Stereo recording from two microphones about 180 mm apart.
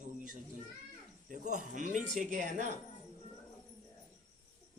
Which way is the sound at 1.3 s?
45° right (ahead or behind).